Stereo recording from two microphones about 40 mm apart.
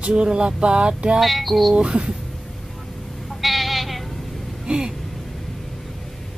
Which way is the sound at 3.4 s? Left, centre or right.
Centre.